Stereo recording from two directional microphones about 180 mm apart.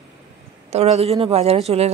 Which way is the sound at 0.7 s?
35° right (ahead or behind).